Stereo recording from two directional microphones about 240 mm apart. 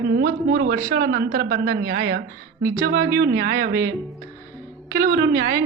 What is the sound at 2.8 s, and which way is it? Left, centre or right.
A woman's voice, right.